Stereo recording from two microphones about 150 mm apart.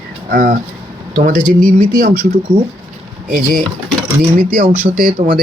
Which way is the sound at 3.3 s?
60° right (ahead or behind).